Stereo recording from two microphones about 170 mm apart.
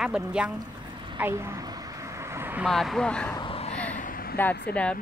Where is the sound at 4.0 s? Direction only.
55° left (ahead or behind).